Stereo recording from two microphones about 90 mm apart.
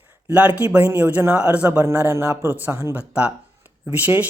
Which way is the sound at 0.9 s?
20° right (ahead or behind).